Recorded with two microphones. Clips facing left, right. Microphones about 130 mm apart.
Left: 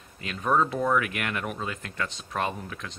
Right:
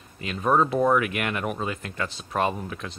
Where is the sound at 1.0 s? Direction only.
10° right (ahead or behind).